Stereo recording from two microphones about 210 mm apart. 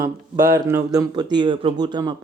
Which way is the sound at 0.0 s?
10° right (ahead or behind).